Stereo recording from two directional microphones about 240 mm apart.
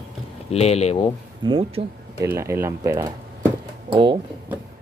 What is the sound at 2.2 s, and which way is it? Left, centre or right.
Speech, centre.